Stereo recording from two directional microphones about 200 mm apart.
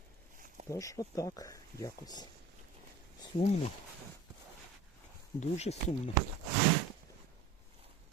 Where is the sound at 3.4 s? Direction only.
30° left (ahead or behind).